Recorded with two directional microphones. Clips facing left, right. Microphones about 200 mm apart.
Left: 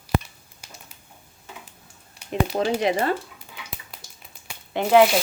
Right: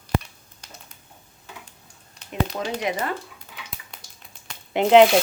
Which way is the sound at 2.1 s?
10° left (ahead or behind).